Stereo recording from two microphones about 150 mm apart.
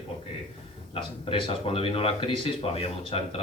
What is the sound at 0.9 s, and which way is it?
Speech, 35° left (ahead or behind).